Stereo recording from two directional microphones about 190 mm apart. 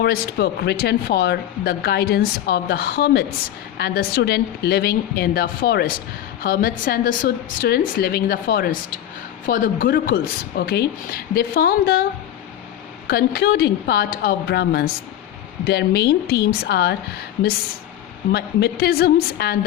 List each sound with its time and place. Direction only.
0.0 s speech: 60° left (ahead or behind)
13.1 s speech: 55° left (ahead or behind)
18.3 s speech: 55° left (ahead or behind)